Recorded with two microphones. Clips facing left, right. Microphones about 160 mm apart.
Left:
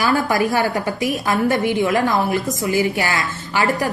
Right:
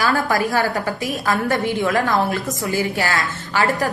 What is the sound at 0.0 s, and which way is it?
A woman's voice, 20° left (ahead or behind).